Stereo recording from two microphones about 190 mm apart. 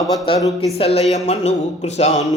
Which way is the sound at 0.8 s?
35° left (ahead or behind).